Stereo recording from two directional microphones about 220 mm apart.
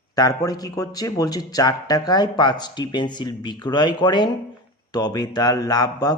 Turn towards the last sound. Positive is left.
turn(degrees=15)  # may be behind; listen again after turning